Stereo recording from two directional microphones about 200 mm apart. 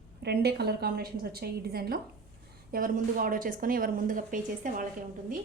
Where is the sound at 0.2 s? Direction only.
55° right (ahead or behind).